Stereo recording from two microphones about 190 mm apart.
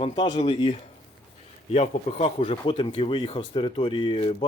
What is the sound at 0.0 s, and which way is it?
Speech, 25° left (ahead or behind).